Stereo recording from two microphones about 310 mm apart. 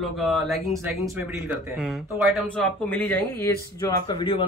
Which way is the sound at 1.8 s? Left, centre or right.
Centre.